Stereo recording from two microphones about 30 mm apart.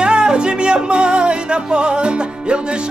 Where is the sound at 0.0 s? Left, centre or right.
Right.